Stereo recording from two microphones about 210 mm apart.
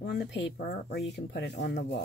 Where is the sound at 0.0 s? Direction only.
50° left (ahead or behind).